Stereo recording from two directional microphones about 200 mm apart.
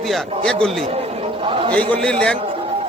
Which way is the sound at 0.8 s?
30° right (ahead or behind).